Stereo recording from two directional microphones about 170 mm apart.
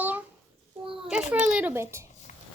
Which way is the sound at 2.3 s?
50° left (ahead or behind).